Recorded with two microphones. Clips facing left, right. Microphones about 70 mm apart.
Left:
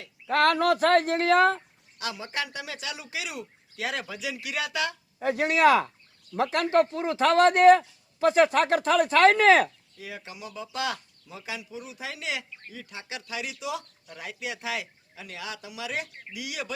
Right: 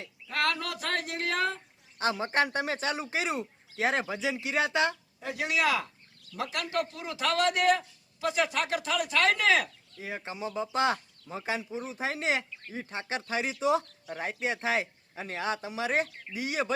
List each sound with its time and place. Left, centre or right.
0.3 s speech: left
2.0 s speech: right
5.2 s speech: left
10.0 s speech: right